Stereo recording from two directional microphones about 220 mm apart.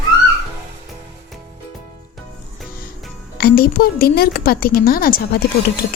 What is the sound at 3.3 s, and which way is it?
A woman's voice, 45° left (ahead or behind).